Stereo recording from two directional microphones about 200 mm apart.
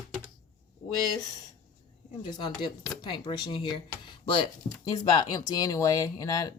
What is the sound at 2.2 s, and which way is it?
Speech, 20° left (ahead or behind).